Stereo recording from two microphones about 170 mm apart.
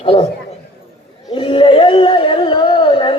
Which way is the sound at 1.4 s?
30° left (ahead or behind).